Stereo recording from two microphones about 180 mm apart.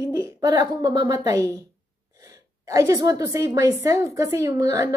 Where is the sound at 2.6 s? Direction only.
20° right (ahead or behind).